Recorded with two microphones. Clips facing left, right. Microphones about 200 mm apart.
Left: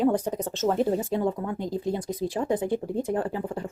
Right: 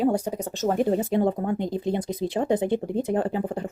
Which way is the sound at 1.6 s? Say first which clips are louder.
Right 2 dB; 20° right (ahead or behind).